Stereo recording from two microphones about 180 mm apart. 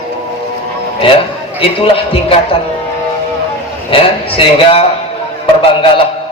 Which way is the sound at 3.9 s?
30° left (ahead or behind).